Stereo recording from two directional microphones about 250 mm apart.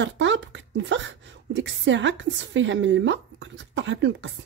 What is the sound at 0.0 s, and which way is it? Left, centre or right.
A woman's voice, right.